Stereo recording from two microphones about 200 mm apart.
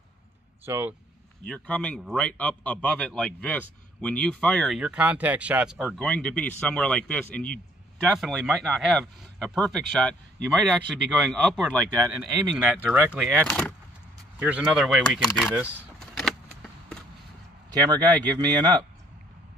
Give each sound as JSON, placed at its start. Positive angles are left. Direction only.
{"t": 0.7, "sound": "speech", "side_deg": -10}
{"t": 1.4, "sound": "speech", "side_deg": 5}
{"t": 5.9, "sound": "speech", "side_deg": 5}
{"t": 12.5, "sound": "speech", "side_deg": -10}
{"t": 14.4, "sound": "speech", "side_deg": -5}
{"t": 15.5, "sound": "vehicle", "side_deg": 0}
{"t": 17.6, "sound": "speech", "side_deg": -20}